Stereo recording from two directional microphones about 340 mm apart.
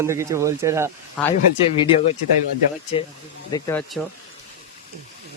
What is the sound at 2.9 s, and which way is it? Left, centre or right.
Speech, centre.